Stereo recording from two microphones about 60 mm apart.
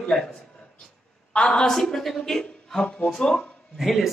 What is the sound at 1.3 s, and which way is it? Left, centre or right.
Speech, centre.